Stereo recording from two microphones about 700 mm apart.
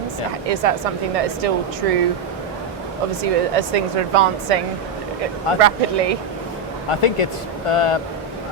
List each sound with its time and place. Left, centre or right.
0.4 s speech: right
3.2 s speech: right
6.8 s speech: left